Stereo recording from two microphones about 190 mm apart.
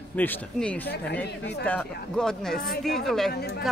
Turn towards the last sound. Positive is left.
turn(degrees=60)  # may be behind; listen again after turning